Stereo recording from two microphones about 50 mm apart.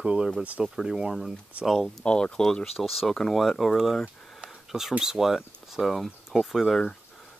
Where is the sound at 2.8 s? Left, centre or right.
Centre.